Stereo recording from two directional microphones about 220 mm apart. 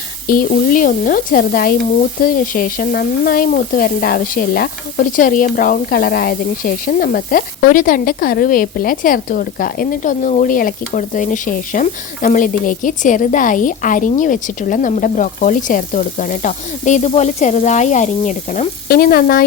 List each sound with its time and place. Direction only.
0.3 s speech: 40° left (ahead or behind)